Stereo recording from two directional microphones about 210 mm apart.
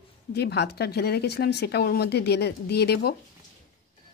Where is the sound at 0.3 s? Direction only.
50° left (ahead or behind).